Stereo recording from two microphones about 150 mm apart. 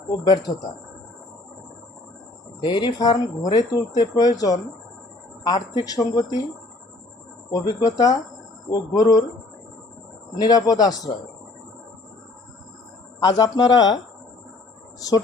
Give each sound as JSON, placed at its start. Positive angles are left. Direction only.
{"t": 0.5, "sound": "speech", "side_deg": 20}
{"t": 2.6, "sound": "speech", "side_deg": 30}
{"t": 7.5, "sound": "speech", "side_deg": 25}
{"t": 10.3, "sound": "speech", "side_deg": 25}
{"t": 13.1, "sound": "speech", "side_deg": 25}